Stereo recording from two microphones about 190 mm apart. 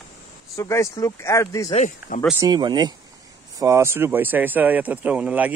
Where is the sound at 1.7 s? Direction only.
40° left (ahead or behind).